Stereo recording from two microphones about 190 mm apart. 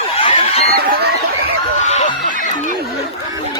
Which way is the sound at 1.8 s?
40° left (ahead or behind).